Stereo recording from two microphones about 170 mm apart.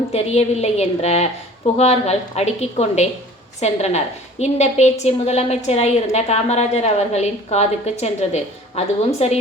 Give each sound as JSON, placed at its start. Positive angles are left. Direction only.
{"t": 0.1, "sound": "a woman's voice", "side_deg": 40}